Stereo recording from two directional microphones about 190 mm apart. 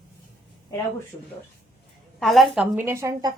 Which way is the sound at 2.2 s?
Centre (ahead or behind).